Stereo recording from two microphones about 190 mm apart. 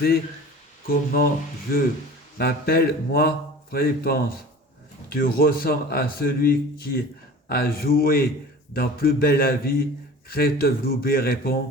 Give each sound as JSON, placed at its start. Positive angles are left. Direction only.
{"t": 0.9, "sound": "a man's voice", "side_deg": 50}